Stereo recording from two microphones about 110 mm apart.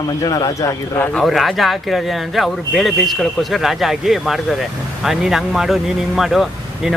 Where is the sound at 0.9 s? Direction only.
20° left (ahead or behind).